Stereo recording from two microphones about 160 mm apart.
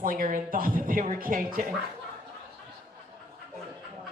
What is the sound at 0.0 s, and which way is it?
A woman's voice, 60° right (ahead or behind).